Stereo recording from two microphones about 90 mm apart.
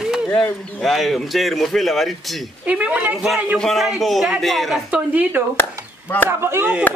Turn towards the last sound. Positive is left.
turn(degrees=-30)  # may be behind; listen again after turning